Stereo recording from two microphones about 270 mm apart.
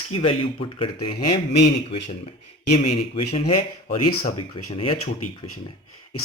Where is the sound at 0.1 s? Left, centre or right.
Left.